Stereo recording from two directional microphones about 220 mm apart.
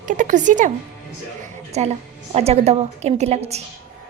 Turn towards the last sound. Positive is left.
turn(degrees=-30)  # may be behind; listen again after turning